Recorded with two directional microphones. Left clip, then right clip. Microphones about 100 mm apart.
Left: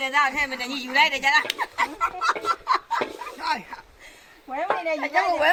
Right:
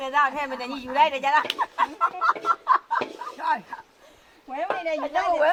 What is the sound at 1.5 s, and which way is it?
Speech, 35° left (ahead or behind).